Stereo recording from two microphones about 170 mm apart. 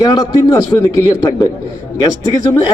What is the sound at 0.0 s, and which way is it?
Speech, 20° left (ahead or behind).